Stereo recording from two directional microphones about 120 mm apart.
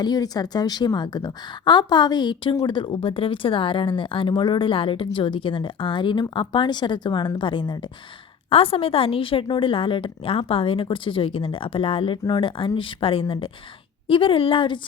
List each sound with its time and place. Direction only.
0.0 s a woman's voice: 35° left (ahead or behind)
8.4 s speech: 50° left (ahead or behind)